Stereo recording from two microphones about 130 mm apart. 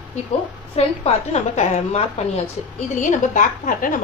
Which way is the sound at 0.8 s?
55° left (ahead or behind).